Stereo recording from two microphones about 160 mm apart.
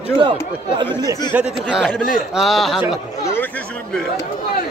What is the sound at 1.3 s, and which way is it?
A man's voice, 5° right (ahead or behind).